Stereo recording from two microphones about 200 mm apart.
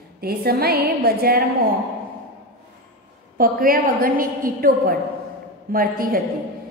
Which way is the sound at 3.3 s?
45° right (ahead or behind).